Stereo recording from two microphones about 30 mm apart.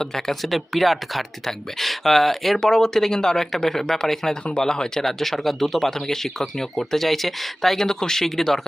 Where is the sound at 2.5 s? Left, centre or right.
Centre.